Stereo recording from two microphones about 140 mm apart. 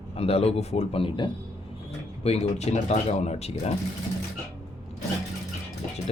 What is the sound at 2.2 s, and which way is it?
Speech, 50° left (ahead or behind).